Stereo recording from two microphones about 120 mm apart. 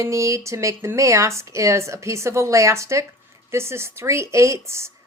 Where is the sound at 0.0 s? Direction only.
25° right (ahead or behind).